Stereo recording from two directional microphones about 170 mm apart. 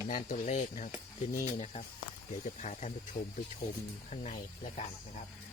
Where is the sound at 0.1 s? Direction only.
50° left (ahead or behind).